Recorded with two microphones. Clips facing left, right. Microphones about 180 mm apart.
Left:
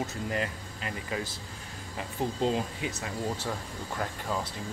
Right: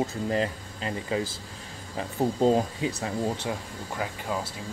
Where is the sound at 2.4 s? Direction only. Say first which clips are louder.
Right 7 dB; 35° right (ahead or behind).